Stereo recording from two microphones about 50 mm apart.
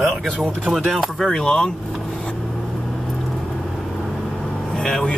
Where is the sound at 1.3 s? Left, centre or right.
Centre.